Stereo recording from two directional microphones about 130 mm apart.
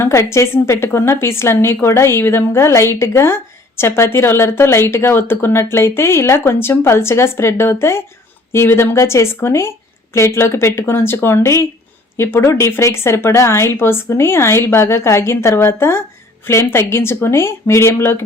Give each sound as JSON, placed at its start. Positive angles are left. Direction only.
{"t": 0.0, "sound": "a woman's voice", "side_deg": 20}